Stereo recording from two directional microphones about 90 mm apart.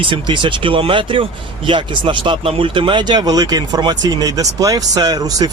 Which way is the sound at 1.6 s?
65° right (ahead or behind).